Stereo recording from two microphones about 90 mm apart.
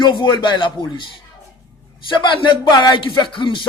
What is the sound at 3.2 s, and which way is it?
Music, 65° left (ahead or behind).